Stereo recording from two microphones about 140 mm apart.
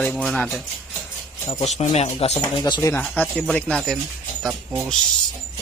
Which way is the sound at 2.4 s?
35° left (ahead or behind).